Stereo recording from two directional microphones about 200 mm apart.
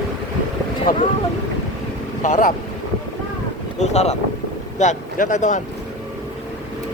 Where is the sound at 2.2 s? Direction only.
40° left (ahead or behind).